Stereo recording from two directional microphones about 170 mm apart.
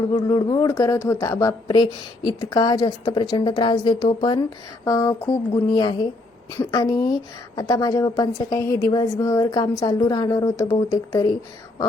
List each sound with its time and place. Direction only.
0.1 s speech: 20° left (ahead or behind)